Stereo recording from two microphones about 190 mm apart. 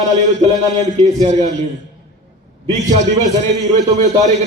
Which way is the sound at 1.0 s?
35° right (ahead or behind).